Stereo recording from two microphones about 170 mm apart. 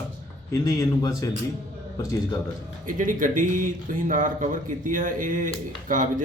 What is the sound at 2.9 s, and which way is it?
Speech, 50° right (ahead or behind).